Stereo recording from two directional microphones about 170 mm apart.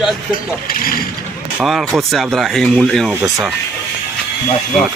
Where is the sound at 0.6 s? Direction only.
60° left (ahead or behind).